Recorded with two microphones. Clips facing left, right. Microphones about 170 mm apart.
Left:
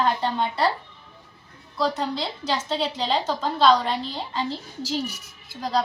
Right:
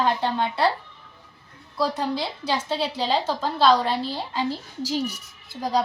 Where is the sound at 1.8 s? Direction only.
10° right (ahead or behind).